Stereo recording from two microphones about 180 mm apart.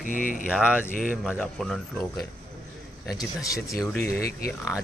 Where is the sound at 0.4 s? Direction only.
5° right (ahead or behind).